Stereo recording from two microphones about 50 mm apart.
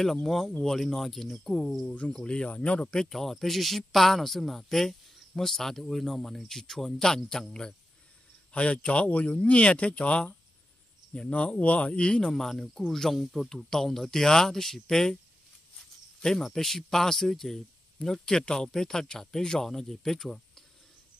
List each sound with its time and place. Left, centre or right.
0.0 s speech: centre
2.2 s speech: left
3.0 s speech: centre
8.5 s speech: left
12.4 s speech: centre
15.8 s a sound: centre
16.4 s speech: centre